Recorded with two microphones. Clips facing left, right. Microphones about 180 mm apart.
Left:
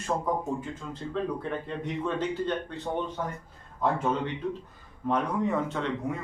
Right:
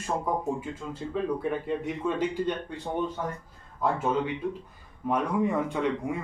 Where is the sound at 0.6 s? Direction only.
10° right (ahead or behind).